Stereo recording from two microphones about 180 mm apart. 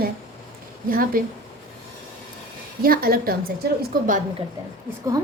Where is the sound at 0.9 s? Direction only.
50° right (ahead or behind).